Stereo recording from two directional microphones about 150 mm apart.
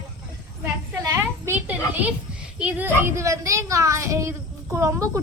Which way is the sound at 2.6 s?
10° right (ahead or behind).